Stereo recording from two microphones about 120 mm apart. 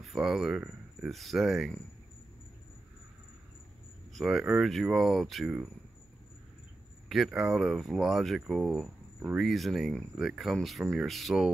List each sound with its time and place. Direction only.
0.0 s speech: centre (ahead or behind)
4.1 s speech: centre (ahead or behind)
7.1 s speech: centre (ahead or behind)